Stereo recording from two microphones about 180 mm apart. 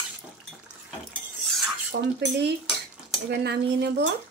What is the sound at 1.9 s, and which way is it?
Speech, 70° right (ahead or behind).